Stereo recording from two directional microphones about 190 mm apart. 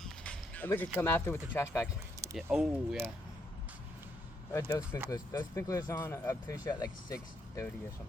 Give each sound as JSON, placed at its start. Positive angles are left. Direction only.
{"t": 0.0, "sound": "speech", "side_deg": 5}
{"t": 2.3, "sound": "speech", "side_deg": -5}
{"t": 4.5, "sound": "speech", "side_deg": 15}